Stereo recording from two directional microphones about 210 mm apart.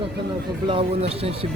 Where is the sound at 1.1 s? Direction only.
30° right (ahead or behind).